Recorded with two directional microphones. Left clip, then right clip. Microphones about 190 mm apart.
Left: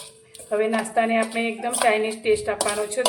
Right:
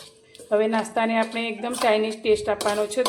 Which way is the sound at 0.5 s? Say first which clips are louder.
Even; 30° right (ahead or behind).